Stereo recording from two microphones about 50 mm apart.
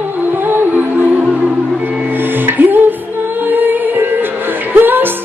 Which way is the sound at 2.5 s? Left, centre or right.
Right.